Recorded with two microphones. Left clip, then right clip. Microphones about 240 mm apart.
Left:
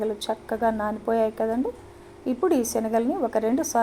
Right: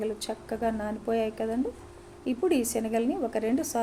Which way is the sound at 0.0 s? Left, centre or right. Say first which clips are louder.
Left 5 dB; centre.